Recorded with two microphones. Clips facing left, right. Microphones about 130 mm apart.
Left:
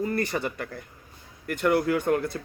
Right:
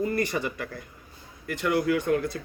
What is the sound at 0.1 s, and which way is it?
Speech, 40° left (ahead or behind).